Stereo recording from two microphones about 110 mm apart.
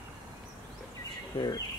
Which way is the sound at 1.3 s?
40° left (ahead or behind).